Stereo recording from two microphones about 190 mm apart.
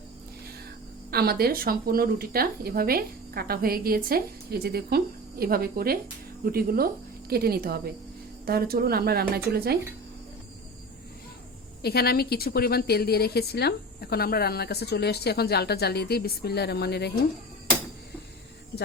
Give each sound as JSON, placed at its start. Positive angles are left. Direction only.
{"t": 1.1, "sound": "speech", "side_deg": -55}
{"t": 11.8, "sound": "a woman's voice", "side_deg": 55}